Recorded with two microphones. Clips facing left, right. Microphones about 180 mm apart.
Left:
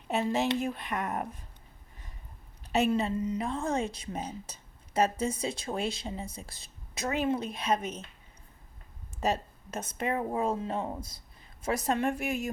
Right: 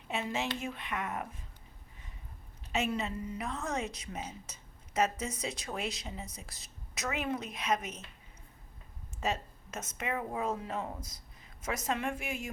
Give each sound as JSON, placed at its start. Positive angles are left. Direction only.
{"t": 0.1, "sound": "a woman's voice", "side_deg": 40}
{"t": 2.7, "sound": "a woman's voice", "side_deg": 35}
{"t": 3.2, "sound": "a woman's voice", "side_deg": 25}
{"t": 9.2, "sound": "a woman's voice", "side_deg": 35}